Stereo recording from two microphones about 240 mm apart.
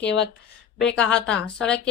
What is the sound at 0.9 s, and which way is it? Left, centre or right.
Speech, centre.